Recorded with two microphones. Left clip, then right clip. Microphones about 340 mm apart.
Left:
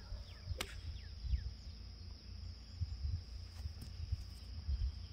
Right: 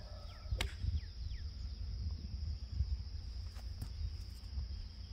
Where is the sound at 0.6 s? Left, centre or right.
Centre.